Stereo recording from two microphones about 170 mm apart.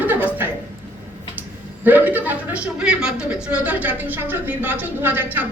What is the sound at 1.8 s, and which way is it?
A woman's voice, 10° right (ahead or behind).